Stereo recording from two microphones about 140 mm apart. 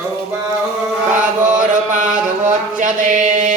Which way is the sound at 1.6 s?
65° right (ahead or behind).